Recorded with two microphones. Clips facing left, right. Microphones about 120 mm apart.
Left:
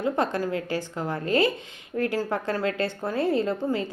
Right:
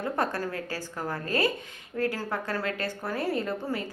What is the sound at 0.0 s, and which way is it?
A woman's voice, 20° left (ahead or behind).